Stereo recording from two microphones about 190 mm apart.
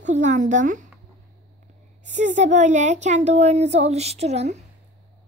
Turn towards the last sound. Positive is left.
turn(degrees=-35)  # may be behind; listen again after turning